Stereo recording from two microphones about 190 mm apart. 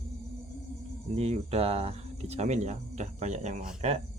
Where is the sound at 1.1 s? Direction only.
35° right (ahead or behind).